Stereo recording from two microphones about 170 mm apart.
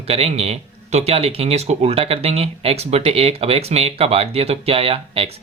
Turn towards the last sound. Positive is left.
turn(degrees=-35)  # may be behind; listen again after turning